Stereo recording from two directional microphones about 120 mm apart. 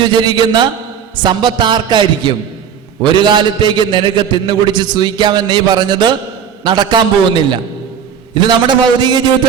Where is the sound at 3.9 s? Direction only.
40° right (ahead or behind).